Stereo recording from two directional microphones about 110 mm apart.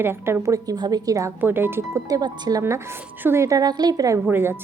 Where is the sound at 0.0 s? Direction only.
20° right (ahead or behind).